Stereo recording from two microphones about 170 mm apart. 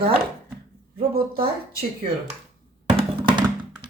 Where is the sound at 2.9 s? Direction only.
30° right (ahead or behind).